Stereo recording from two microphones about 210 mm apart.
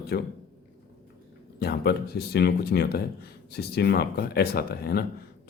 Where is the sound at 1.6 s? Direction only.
50° left (ahead or behind).